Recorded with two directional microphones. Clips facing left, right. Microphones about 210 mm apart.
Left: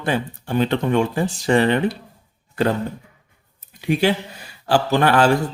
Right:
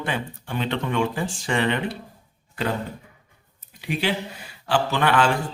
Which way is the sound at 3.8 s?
45° left (ahead or behind).